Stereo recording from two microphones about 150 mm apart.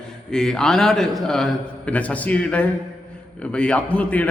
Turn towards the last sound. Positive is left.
turn(degrees=10)  # may be behind; listen again after turning